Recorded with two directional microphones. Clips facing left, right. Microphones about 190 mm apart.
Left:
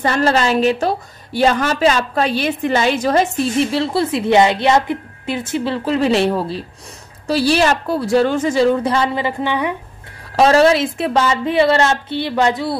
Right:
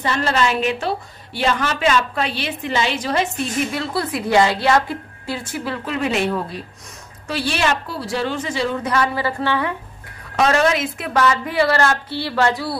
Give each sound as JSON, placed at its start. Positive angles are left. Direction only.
{"t": 0.0, "sound": "a woman's voice", "side_deg": 40}
{"t": 8.8, "sound": "a woman's voice", "side_deg": 30}
{"t": 10.3, "sound": "a woman's voice", "side_deg": 35}